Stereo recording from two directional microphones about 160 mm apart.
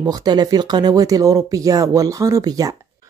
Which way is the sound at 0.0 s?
25° right (ahead or behind).